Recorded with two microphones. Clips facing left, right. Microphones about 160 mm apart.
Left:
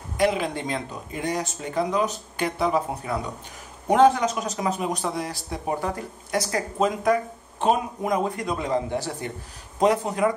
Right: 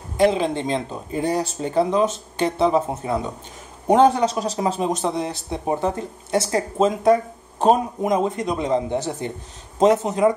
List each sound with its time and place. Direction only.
0.2 s speech: 25° right (ahead or behind)
8.0 s speech: 20° right (ahead or behind)